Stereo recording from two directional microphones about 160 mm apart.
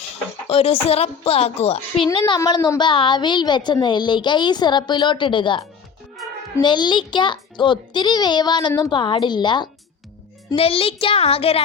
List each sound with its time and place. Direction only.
0.4 s a child's voice: 35° left (ahead or behind)
2.1 s a woman's voice: 30° left (ahead or behind)